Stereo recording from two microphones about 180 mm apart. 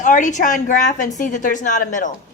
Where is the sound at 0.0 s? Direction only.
45° left (ahead or behind).